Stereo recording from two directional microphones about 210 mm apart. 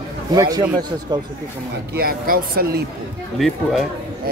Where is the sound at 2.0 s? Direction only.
45° right (ahead or behind).